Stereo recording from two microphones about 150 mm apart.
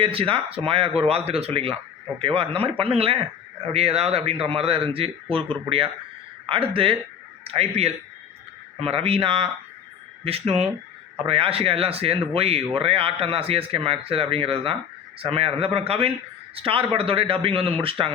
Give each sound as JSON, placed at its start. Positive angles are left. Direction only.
{"t": 0.0, "sound": "speech", "side_deg": -35}